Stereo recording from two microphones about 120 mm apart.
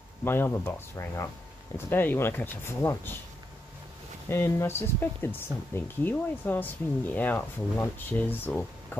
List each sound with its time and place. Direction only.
0.2 s speech: 20° left (ahead or behind)
4.3 s speech: 20° left (ahead or behind)